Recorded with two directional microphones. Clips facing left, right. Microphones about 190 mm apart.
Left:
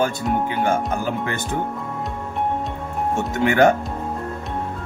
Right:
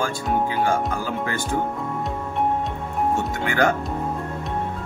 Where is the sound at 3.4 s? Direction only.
25° left (ahead or behind).